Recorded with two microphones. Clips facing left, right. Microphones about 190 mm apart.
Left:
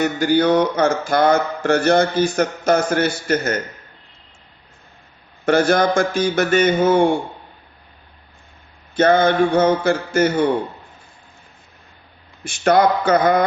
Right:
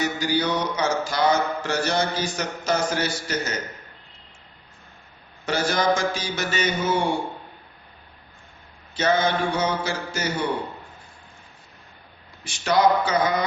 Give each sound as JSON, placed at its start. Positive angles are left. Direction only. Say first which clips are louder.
{"t": 0.0, "sound": "mantra", "louder": "left 7 dB", "side_deg": 55}
{"t": 5.5, "sound": "mantra", "louder": "left 7 dB", "side_deg": 55}
{"t": 9.0, "sound": "mantra", "louder": "left 7 dB", "side_deg": 55}
{"t": 12.5, "sound": "speech", "louder": "left 4 dB", "side_deg": 55}